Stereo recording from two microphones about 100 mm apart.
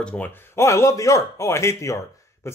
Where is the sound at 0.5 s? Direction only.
30° left (ahead or behind).